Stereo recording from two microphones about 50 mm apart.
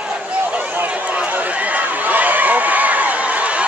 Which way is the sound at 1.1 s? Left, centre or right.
Right.